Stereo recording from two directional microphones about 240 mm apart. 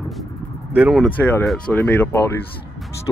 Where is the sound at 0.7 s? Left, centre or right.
Centre.